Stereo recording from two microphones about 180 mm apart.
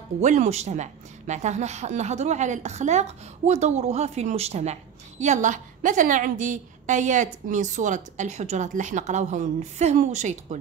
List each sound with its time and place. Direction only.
0.2 s a woman's voice: 40° right (ahead or behind)